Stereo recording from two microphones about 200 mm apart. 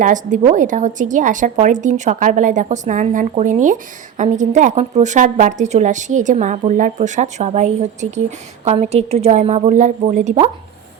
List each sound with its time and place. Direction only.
0.0 s a woman's voice: 40° right (ahead or behind)